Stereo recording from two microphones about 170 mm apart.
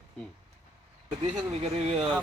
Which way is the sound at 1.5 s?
40° right (ahead or behind).